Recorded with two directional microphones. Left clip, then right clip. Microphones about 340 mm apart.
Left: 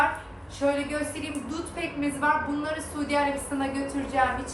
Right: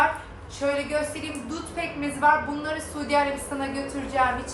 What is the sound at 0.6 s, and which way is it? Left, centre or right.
A woman's voice, centre.